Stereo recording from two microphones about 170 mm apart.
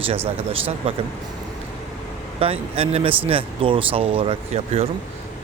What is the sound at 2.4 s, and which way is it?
A man's voice, 35° right (ahead or behind).